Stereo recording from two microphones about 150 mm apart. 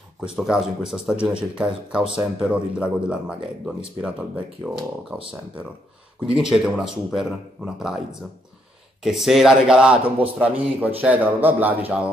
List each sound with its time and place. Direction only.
0.4 s speech: 5° right (ahead or behind)
6.3 s speech: 5° right (ahead or behind)
10.0 s a man's voice: 35° right (ahead or behind)
10.4 s speech: 10° right (ahead or behind)